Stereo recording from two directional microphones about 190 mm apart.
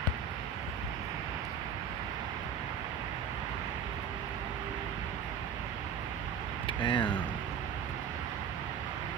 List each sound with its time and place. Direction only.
6.8 s speech: 25° left (ahead or behind)